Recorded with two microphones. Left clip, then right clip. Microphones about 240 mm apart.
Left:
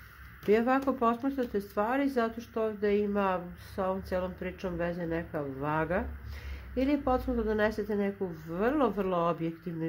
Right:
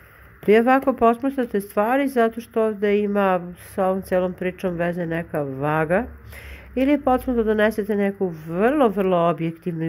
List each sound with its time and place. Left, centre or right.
0.5 s speech: right